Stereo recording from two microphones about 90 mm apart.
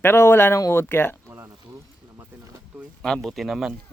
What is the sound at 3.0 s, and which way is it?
Speech, 5° left (ahead or behind).